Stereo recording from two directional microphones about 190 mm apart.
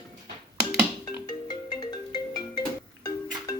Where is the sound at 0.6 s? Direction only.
5° right (ahead or behind).